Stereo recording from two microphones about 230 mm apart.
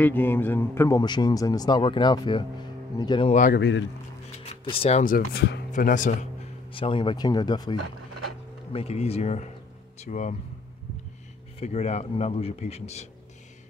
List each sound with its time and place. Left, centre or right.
0.0 s a man's voice: centre; by 3.5 s left
3.5 s speech: left
4.6 s speech: left
6.7 s a man's voice: left
8.7 s a man's voice: left
11.6 s a man's voice: left